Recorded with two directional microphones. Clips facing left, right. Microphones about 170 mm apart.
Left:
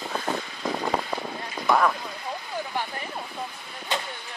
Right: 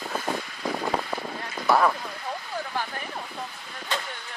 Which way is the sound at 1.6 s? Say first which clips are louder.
Right 1 dB; 5° right (ahead or behind).